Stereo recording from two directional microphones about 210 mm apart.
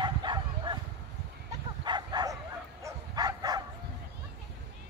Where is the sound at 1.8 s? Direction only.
20° right (ahead or behind).